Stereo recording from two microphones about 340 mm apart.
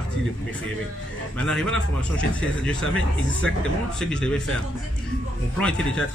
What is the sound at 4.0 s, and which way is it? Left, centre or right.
Speech, centre.